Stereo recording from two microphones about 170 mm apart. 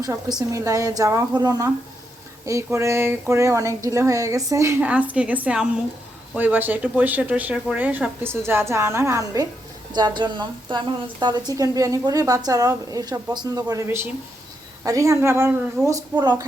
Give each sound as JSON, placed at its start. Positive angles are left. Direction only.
{"t": 0.0, "sound": "a woman's voice", "side_deg": -25}